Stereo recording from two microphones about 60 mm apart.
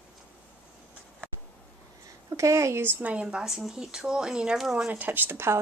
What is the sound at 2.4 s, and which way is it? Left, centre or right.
Speech, right.